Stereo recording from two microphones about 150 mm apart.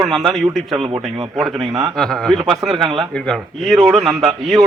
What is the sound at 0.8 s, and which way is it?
Speech, 35° right (ahead or behind).